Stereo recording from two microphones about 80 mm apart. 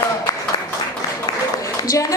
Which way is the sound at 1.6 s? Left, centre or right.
Left.